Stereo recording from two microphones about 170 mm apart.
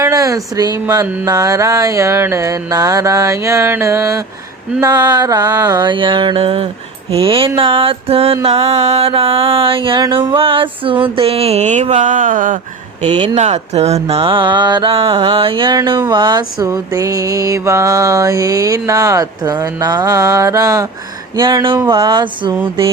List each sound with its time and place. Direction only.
0.0 s speech: 20° right (ahead or behind)
1.0 s mantra: 10° right (ahead or behind)
1.3 s a sound: 20° right (ahead or behind)